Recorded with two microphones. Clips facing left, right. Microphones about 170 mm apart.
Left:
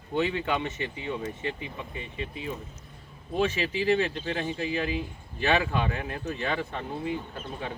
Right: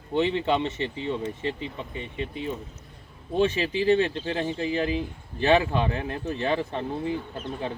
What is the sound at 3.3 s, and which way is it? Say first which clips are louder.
Speech: right 3 dB; 30° right (ahead or behind).